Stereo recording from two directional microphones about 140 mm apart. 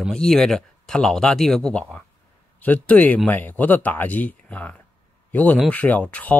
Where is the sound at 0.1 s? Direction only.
5° left (ahead or behind).